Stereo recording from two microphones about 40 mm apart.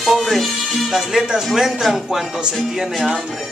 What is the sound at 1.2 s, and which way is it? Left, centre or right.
Speech, centre.